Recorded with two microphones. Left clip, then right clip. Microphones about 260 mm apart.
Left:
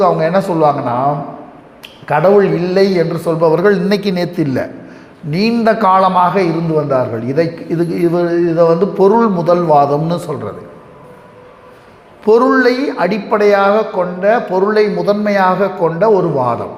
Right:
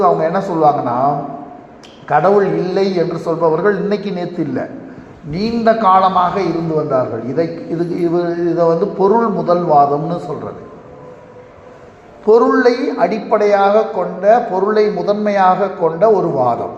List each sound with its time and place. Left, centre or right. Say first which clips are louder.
0.0 s a man's voice: left 1 dB; left
12.2 s a man's voice: left 1 dB; left